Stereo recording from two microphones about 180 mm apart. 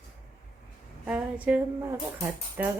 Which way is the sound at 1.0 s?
10° right (ahead or behind).